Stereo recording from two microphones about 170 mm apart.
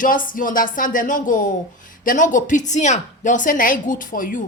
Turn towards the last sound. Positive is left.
turn(degrees=50)  # may be behind; listen again after turning